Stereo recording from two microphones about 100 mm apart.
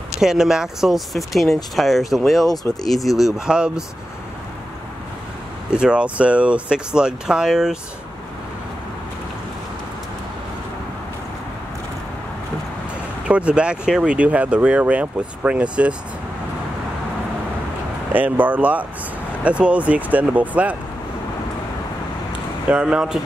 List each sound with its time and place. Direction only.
0.2 s speech: 5° right (ahead or behind)
5.7 s speech: 10° right (ahead or behind)
13.3 s speech: 10° right (ahead or behind)
18.1 s speech: 15° right (ahead or behind)
22.7 s speech: 10° right (ahead or behind)